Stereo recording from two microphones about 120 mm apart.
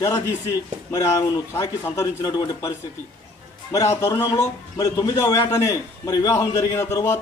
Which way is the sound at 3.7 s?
30° left (ahead or behind).